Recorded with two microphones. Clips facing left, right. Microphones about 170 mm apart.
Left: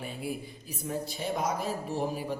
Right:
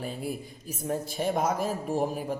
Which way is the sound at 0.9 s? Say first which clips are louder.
Right 4 dB; 50° right (ahead or behind).